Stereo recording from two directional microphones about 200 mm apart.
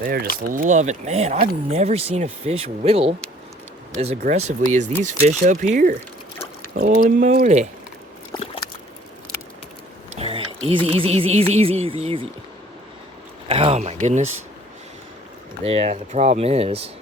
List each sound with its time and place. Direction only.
0.0 s speech: 50° right (ahead or behind)
8.3 s a sound: 25° left (ahead or behind)
10.2 s speech: 30° right (ahead or behind)
13.5 s speech: 30° right (ahead or behind)
15.6 s speech: 30° right (ahead or behind)